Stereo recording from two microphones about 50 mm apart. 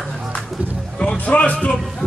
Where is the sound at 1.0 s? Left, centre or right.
Left.